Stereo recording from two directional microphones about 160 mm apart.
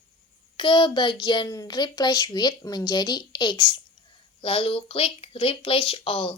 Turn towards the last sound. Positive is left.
turn(degrees=35)  # may be behind; listen again after turning